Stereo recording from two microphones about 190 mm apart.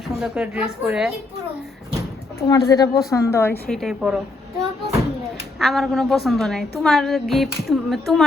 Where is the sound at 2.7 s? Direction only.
20° left (ahead or behind); by 4.2 s centre (ahead or behind).